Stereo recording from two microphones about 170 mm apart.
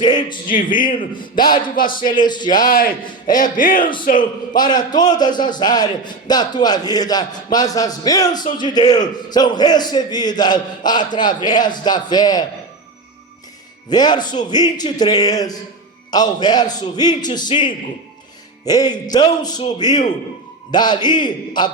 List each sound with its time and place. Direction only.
0.0 s a man's voice: 25° left (ahead or behind)
0.4 s a man's voice: 50° left (ahead or behind)
1.1 s a man's voice: 25° left (ahead or behind)
1.6 s a man's voice: 55° left (ahead or behind)
2.1 s a man's voice: 25° left (ahead or behind)
2.6 s a man's voice: 55° left (ahead or behind)
4.2 s a man's voice: 25° left (ahead or behind)
13.9 s a man's voice: 25° left (ahead or behind)